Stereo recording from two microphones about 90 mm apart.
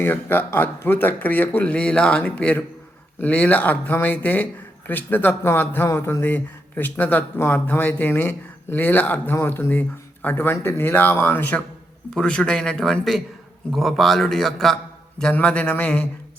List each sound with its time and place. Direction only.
0.0 s speech: 20° left (ahead or behind)
12.1 s a man's voice: 10° left (ahead or behind)
15.2 s speech: 15° left (ahead or behind)